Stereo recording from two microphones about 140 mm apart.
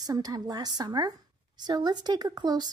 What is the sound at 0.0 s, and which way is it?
Speech, 25° right (ahead or behind).